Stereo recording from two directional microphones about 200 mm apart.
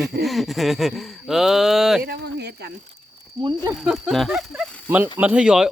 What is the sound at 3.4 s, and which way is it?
Speech, 15° right (ahead or behind).